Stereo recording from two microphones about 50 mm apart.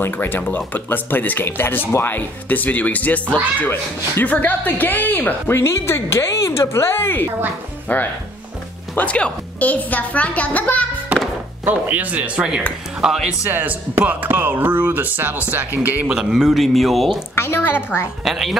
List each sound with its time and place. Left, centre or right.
0.0 s speech: left
5.5 s speech: left
7.9 s speech: left
11.7 s speech: right
12.4 s speech: centre
13.5 s speech: right
16.1 s speech: centre
17.4 s speech: left
18.2 s speech: centre